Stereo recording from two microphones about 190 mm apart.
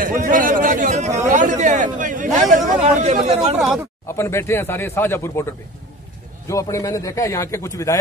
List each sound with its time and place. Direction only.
0.0 s a sound: 45° right (ahead or behind)
2.5 s speech: 40° right (ahead or behind)
3.5 s speech: centre (ahead or behind)
4.2 s a man's voice: 15° left (ahead or behind)